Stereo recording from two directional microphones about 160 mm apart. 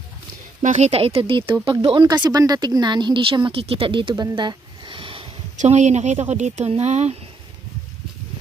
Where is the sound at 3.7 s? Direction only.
35° right (ahead or behind).